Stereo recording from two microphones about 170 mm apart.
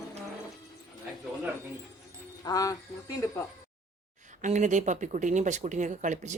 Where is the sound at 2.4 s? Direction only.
20° left (ahead or behind).